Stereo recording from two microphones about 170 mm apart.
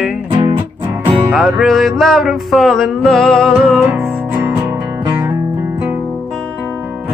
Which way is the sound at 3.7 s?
15° right (ahead or behind).